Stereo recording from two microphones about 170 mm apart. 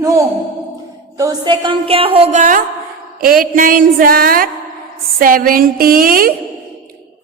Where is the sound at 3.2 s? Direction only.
55° right (ahead or behind).